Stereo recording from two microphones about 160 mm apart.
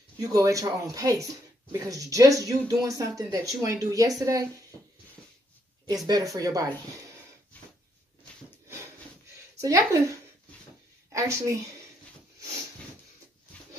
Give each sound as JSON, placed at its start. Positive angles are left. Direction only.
{"t": 0.2, "sound": "speech", "side_deg": -20}
{"t": 6.0, "sound": "speech", "side_deg": -20}
{"t": 7.5, "sound": "a sound", "side_deg": 10}
{"t": 9.6, "sound": "speech", "side_deg": -20}